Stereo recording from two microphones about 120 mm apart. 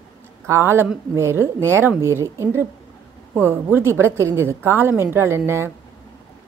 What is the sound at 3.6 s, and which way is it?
A woman's voice, 20° right (ahead or behind).